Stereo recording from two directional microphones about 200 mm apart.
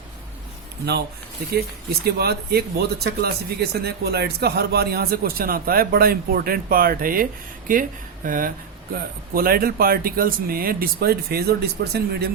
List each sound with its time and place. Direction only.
1.5 s speech: 50° right (ahead or behind)